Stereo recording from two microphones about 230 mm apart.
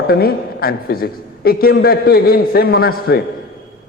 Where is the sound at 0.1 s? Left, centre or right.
Left.